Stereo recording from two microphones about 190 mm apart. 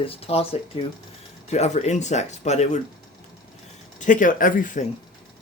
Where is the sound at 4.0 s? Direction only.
45° left (ahead or behind).